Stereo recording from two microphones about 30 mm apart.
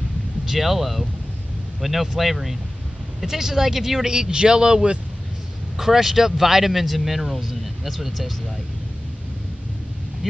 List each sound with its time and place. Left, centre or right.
0.5 s speech: centre
3.2 s speech: centre
4.1 s a man's voice: right
5.8 s speech: centre